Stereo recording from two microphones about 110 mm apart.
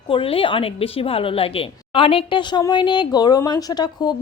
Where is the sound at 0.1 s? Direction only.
55° left (ahead or behind).